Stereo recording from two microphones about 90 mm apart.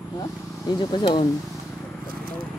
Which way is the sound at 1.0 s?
70° left (ahead or behind).